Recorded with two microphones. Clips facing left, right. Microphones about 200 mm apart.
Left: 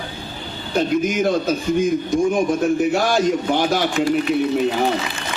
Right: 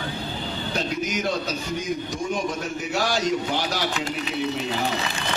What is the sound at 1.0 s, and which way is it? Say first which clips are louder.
Speech: left 8 dB; 50° left (ahead or behind).